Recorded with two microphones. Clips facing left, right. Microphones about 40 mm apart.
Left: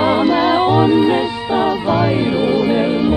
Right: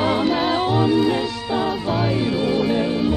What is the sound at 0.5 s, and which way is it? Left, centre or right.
Music, left.